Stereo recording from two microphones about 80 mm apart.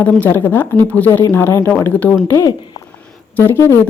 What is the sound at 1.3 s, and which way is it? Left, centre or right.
Speech, left.